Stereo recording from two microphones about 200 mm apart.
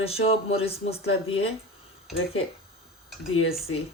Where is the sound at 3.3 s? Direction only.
90° left.